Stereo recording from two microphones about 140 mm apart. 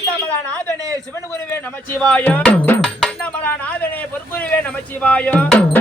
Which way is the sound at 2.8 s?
5° left (ahead or behind).